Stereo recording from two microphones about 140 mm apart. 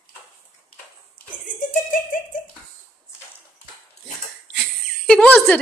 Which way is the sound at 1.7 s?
85° left.